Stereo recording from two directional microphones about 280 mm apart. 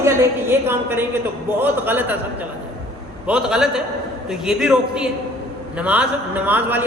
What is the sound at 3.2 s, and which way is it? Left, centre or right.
A woman's voice, centre.